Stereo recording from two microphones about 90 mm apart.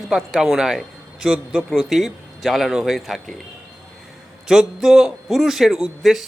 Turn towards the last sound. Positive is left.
turn(degrees=0)  # may be behind; listen again after turning